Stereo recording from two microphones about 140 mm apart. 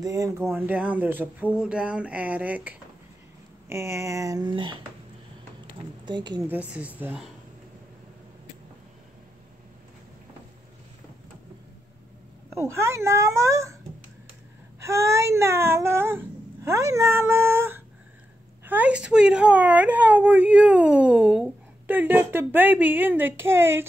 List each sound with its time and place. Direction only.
0.0 s speech: 25° right (ahead or behind)
6.0 s a woman's voice: 35° right (ahead or behind)
6.4 s speech: 10° right (ahead or behind)
12.5 s speech: 20° right (ahead or behind)
14.8 s speech: 20° right (ahead or behind)